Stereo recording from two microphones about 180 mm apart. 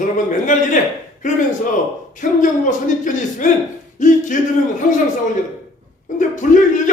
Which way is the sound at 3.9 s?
45° left (ahead or behind).